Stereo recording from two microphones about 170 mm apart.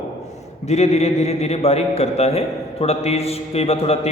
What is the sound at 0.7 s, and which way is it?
A man's voice, 40° left (ahead or behind).